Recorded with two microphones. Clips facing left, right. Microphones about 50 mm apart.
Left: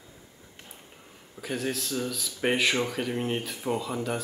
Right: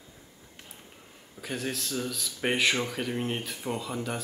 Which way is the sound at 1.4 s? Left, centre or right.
Centre.